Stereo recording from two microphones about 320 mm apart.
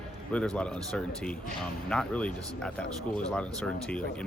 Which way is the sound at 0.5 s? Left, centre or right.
Centre.